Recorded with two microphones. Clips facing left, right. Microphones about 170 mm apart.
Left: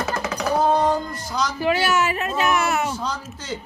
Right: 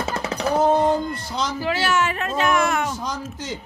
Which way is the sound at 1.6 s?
15° left (ahead or behind).